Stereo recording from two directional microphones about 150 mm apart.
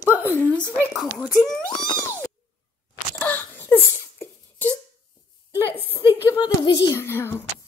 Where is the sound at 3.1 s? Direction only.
15° left (ahead or behind).